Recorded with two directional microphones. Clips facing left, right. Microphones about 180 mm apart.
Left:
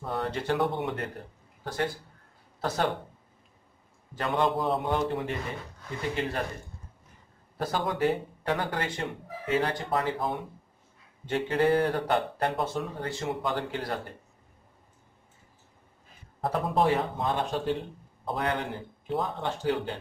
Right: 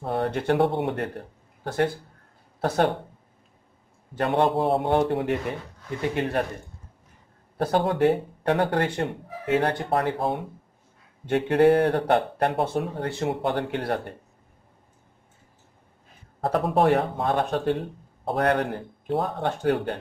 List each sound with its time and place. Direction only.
0.0 s a man's voice: 55° right (ahead or behind)
4.5 s a man's voice: 30° right (ahead or behind)
4.8 s a man's voice: 60° right (ahead or behind)
7.5 s a man's voice: 60° right (ahead or behind)
10.1 s a man's voice: 30° right (ahead or behind)
11.2 s a man's voice: 60° right (ahead or behind)
16.3 s a man's voice: 70° right (ahead or behind)